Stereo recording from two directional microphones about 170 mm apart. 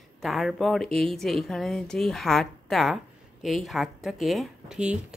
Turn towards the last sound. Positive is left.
turn(degrees=-5)  # may be behind; listen again after turning